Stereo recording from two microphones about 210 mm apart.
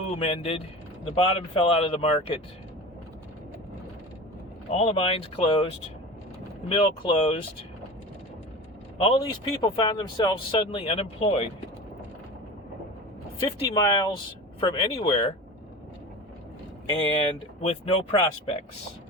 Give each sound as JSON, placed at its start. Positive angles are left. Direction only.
{"t": 0.2, "sound": "speech", "side_deg": 30}
{"t": 4.7, "sound": "speech", "side_deg": 30}
{"t": 6.7, "sound": "speech", "side_deg": 25}
{"t": 9.0, "sound": "speech", "side_deg": 25}
{"t": 13.4, "sound": "speech", "side_deg": 20}
{"t": 17.6, "sound": "speech", "side_deg": 30}